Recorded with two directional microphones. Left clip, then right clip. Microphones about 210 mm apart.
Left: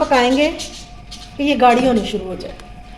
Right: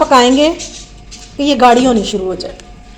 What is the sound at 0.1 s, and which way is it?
A woman's voice, 40° right (ahead or behind).